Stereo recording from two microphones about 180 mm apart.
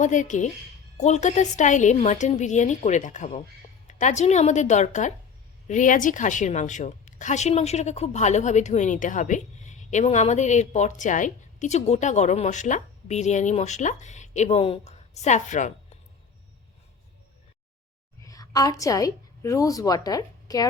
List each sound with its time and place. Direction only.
0.0 s a woman's voice: 45° left (ahead or behind)
18.2 s a woman's voice: 20° left (ahead or behind)